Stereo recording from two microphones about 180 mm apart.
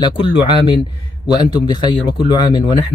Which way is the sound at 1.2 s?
25° left (ahead or behind).